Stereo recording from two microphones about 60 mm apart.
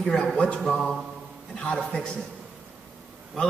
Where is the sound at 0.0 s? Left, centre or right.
Centre.